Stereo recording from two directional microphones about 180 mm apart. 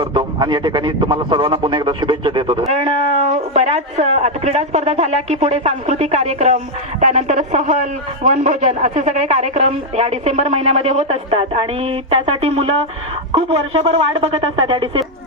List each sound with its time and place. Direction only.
0.0 s speech: 25° right (ahead or behind)